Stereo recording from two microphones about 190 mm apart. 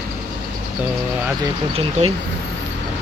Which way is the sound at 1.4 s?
30° right (ahead or behind).